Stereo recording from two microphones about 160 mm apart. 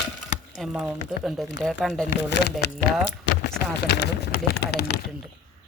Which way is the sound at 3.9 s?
90° left.